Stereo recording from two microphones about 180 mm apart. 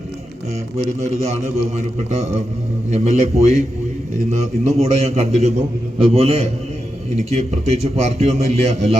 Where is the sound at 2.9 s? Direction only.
35° right (ahead or behind).